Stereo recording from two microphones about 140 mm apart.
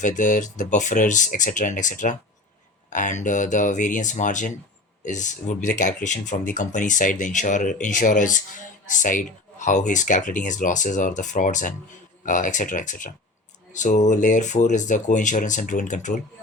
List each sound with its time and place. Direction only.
0.0 s speech: 65° left (ahead or behind)